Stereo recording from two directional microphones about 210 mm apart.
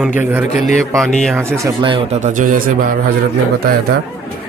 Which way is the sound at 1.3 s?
10° right (ahead or behind).